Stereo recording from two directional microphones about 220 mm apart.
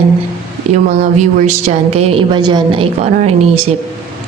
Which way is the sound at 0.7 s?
30° right (ahead or behind).